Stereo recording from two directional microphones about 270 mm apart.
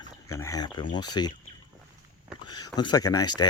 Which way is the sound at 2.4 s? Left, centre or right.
Centre.